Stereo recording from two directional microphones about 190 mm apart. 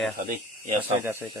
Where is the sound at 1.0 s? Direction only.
10° right (ahead or behind).